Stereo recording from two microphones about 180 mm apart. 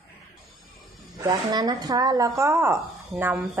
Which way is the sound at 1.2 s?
20° right (ahead or behind).